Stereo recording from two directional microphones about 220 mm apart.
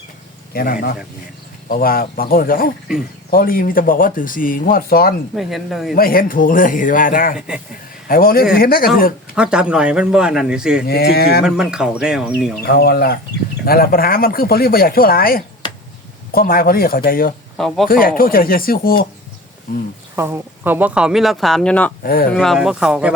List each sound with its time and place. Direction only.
0.5 s speech: 40° left (ahead or behind)
5.3 s speech: centre (ahead or behind)
5.9 s speech: 40° left (ahead or behind)
7.3 s speech: 5° right (ahead or behind)
8.0 s speech: 40° left (ahead or behind)
9.3 s speech: 5° right (ahead or behind)
10.8 s speech: 45° left (ahead or behind)
11.4 s speech: 5° right (ahead or behind)
12.6 s speech: 45° left (ahead or behind)
17.6 s speech: centre (ahead or behind)
17.8 s speech: 40° left (ahead or behind)
20.1 s speech: 10° right (ahead or behind); by 21.9 s 5° left (ahead or behind)
22.0 s speech: 40° left (ahead or behind)
22.3 s speech: centre (ahead or behind)